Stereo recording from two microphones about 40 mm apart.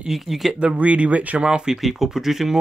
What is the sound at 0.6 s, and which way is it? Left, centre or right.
Speech, right.